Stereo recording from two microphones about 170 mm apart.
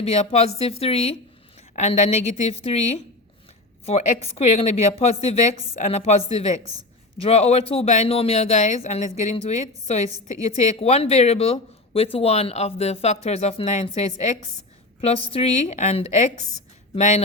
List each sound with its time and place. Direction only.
0.0 s speech: 40° left (ahead or behind)
3.8 s a woman's voice: 35° left (ahead or behind)